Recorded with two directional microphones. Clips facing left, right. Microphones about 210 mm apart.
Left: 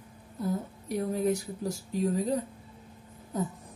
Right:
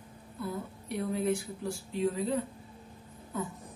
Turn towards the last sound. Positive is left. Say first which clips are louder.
# left 4 dB
turn(degrees=40)  # may be behind; listen again after turning